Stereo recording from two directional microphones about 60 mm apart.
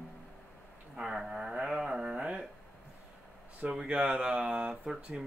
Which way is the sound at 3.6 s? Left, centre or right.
Centre.